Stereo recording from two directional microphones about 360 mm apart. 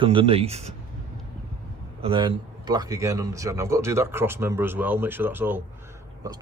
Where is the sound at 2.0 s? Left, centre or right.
Centre.